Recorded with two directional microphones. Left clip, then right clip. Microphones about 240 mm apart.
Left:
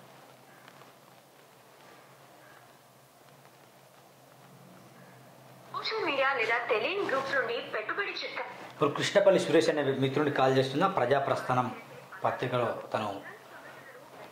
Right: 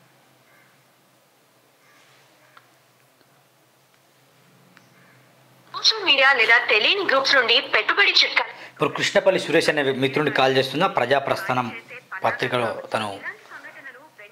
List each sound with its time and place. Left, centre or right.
5.7 s a sound: centre
6.0 s a woman's voice: right
7.1 s speech: right